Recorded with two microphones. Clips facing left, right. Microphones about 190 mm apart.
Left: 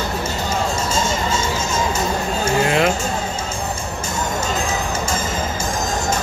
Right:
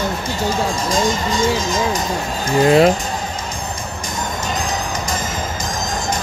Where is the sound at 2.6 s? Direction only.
35° right (ahead or behind).